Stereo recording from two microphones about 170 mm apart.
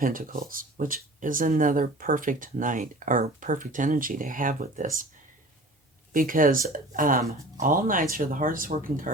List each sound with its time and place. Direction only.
0.0 s speech: 55° right (ahead or behind)
6.1 s speech: 55° right (ahead or behind)